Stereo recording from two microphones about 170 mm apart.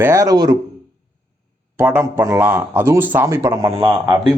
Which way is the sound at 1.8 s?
10° right (ahead or behind).